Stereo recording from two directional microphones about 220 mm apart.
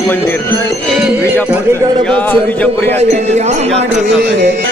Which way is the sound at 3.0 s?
30° right (ahead or behind).